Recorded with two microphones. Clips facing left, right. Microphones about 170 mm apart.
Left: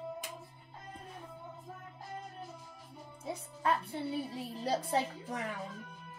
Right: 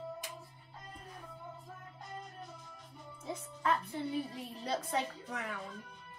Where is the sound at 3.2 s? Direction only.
30° left (ahead or behind).